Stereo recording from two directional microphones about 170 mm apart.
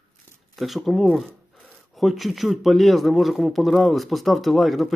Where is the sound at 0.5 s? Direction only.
Centre (ahead or behind).